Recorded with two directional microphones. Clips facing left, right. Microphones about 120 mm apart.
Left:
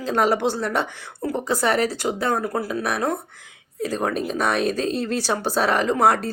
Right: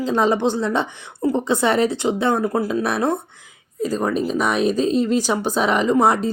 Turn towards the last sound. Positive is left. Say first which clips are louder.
# right 2 dB
turn(degrees=-20)  # may be behind; listen again after turning